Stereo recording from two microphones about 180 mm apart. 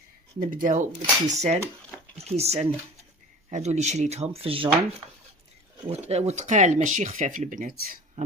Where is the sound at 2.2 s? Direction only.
35° right (ahead or behind).